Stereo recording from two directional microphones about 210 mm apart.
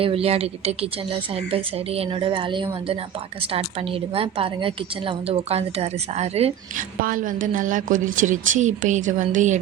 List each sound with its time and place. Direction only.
0.0 s a woman's voice: 30° right (ahead or behind)